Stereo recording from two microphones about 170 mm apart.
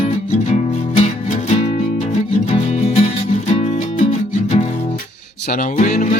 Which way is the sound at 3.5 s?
40° left (ahead or behind).